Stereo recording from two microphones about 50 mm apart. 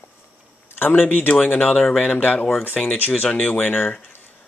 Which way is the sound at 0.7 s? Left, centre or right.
Left.